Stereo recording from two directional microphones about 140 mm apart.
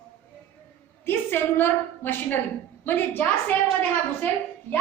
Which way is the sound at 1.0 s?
15° left (ahead or behind).